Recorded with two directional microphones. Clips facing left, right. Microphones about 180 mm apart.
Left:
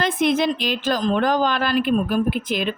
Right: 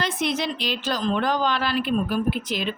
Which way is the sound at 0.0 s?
50° left (ahead or behind).